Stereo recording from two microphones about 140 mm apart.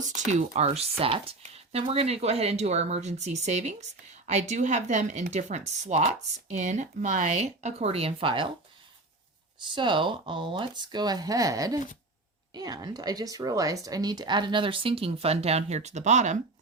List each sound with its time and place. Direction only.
0.3 s speech: 55° right (ahead or behind)
1.4 s a sound: 45° right (ahead or behind)
1.9 s speech: 45° right (ahead or behind)
9.6 s a woman's voice: 35° right (ahead or behind); by 16.4 s 55° right (ahead or behind)